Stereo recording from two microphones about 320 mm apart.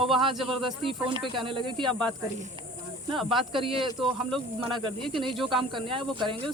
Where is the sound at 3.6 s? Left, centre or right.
Centre.